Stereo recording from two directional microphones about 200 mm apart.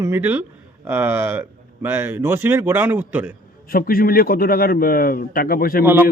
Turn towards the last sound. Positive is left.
turn(degrees=-10)  # may be behind; listen again after turning